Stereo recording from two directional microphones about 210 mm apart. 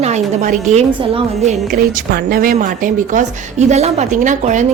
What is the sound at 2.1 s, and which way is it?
A woman's voice, 45° right (ahead or behind).